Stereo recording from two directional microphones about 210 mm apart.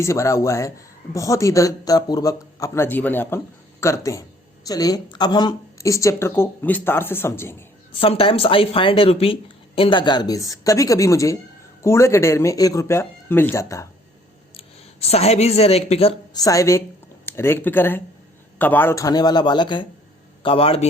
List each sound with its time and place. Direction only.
0.0 s speech: 15° left (ahead or behind)
7.9 s speech: 25° left (ahead or behind)
15.1 s speech: 30° left (ahead or behind)
16.4 s speech: 15° left (ahead or behind)